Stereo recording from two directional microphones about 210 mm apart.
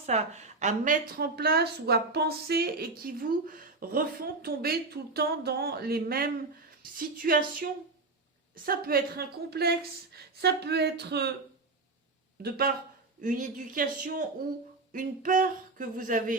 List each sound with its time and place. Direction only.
0.1 s a woman's voice: 35° right (ahead or behind)
8.5 s a woman's voice: 45° right (ahead or behind)
12.4 s a woman's voice: 45° right (ahead or behind)